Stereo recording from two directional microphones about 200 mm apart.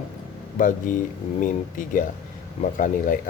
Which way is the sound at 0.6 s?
40° left (ahead or behind).